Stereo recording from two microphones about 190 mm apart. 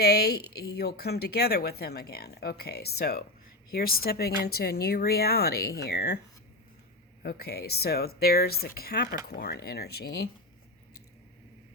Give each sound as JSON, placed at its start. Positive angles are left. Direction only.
{"t": 0.0, "sound": "a woman's voice", "side_deg": 55}
{"t": 7.2, "sound": "a woman's voice", "side_deg": 55}